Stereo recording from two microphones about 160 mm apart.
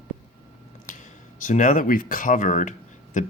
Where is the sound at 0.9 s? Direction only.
55° left (ahead or behind).